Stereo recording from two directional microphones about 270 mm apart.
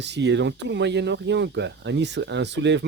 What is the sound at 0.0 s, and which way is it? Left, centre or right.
Speech, right.